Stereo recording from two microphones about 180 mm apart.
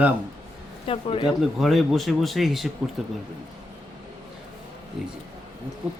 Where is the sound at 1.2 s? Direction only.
Centre (ahead or behind).